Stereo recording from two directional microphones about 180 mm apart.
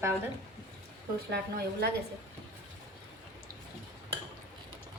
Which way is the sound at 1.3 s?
65° right (ahead or behind).